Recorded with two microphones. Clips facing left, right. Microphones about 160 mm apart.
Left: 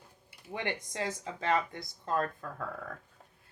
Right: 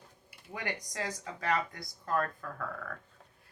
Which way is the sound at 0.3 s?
25° left (ahead or behind).